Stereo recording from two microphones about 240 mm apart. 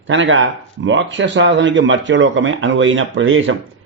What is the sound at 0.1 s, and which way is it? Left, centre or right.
A man's voice, right.